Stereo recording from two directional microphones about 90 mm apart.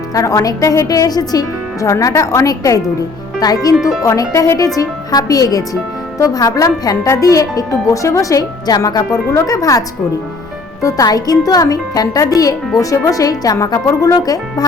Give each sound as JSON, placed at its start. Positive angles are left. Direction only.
{"t": 0.1, "sound": "speech", "side_deg": 40}